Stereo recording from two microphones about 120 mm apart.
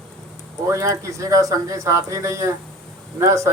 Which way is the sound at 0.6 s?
25° right (ahead or behind).